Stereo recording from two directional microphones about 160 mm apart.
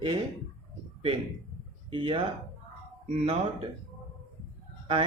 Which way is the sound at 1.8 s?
35° right (ahead or behind).